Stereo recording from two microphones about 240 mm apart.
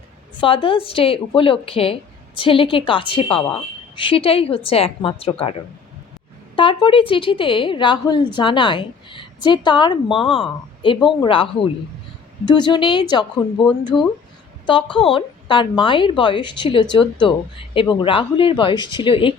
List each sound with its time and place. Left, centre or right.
0.3 s a woman's voice: left